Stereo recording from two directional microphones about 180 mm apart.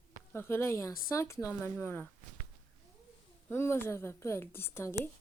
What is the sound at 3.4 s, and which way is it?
A woman's voice, 15° left (ahead or behind).